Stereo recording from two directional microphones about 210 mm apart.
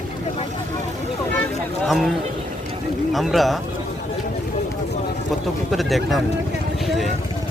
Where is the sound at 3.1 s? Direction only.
Centre (ahead or behind).